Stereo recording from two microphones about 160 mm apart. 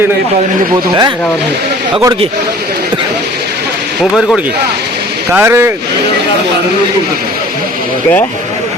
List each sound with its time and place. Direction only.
0.7 s speech: 25° right (ahead or behind)
5.3 s speech: 15° right (ahead or behind)